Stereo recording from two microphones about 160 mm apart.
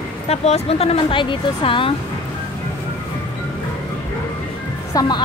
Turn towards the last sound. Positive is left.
turn(degrees=25)  # may be behind; listen again after turning